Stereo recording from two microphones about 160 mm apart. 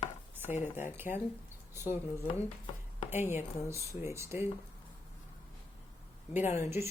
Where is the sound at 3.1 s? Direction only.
15° right (ahead or behind).